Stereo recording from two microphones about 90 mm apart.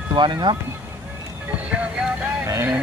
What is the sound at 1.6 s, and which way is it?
Music, 10° right (ahead or behind).